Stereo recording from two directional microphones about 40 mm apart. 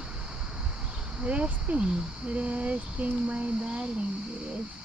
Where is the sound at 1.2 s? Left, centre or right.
Right.